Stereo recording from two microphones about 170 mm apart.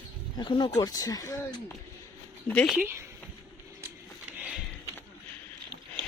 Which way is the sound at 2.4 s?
5° left (ahead or behind).